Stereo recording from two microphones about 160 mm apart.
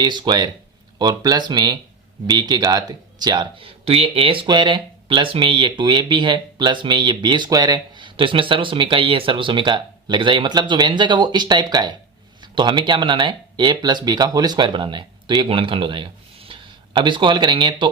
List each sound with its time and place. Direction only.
0.0 s speech: 25° right (ahead or behind)